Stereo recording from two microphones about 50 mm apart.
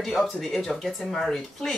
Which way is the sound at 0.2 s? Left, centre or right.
Centre.